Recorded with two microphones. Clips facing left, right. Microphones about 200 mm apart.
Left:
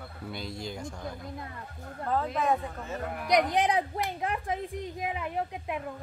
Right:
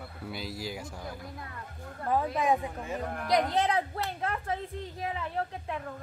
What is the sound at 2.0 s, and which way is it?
Speech, 15° right (ahead or behind).